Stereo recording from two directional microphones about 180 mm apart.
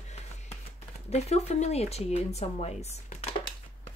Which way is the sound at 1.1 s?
35° left (ahead or behind).